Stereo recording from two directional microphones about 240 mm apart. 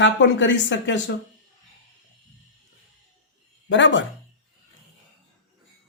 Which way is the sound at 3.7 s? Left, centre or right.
Left.